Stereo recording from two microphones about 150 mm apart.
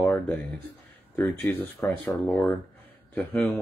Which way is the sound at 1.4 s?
10° left (ahead or behind).